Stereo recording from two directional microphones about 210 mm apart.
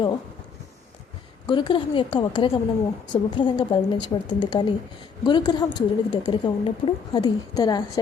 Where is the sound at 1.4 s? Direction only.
20° left (ahead or behind).